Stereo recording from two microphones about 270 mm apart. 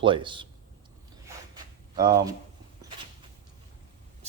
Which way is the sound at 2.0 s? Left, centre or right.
Centre.